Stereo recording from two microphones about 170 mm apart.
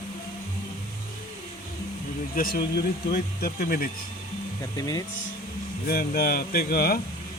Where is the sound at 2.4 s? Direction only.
60° left (ahead or behind).